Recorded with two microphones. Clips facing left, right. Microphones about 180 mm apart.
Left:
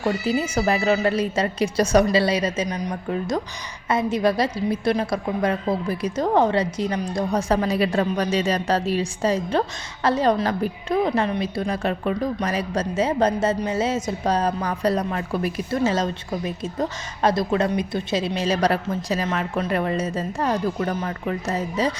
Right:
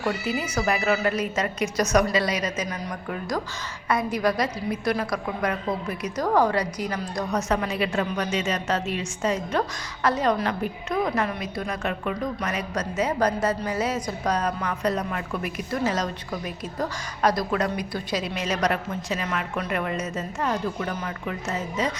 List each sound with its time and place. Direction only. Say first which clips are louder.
0.0 s a woman's voice: left 4 dB; 30° left (ahead or behind)